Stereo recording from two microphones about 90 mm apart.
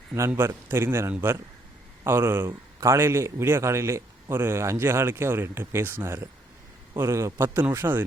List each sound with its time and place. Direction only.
0.3 s a man's voice: 25° right (ahead or behind)